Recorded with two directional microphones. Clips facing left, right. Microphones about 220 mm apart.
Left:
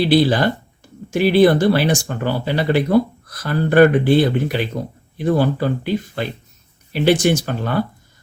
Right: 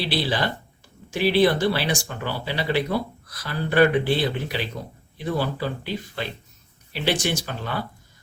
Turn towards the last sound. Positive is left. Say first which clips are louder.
# left 9 dB
turn(degrees=50)  # may be behind; listen again after turning